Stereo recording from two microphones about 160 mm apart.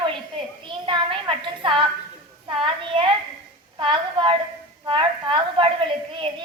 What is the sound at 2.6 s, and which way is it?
A woman's voice, 30° right (ahead or behind).